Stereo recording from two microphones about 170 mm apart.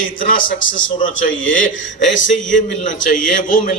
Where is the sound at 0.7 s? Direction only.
50° left (ahead or behind).